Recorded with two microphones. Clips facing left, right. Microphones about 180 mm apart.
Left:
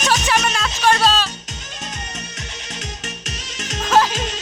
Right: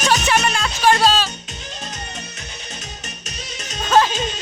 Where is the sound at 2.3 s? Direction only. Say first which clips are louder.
Left 2 dB; 90° left.